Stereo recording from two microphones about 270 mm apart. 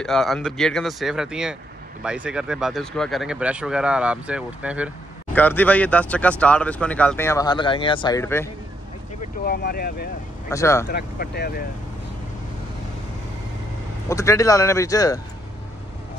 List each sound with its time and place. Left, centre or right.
0.0 s speech: centre
5.3 s speech: centre
9.4 s speech: left
10.5 s speech: centre
10.9 s speech: left
14.0 s speech: centre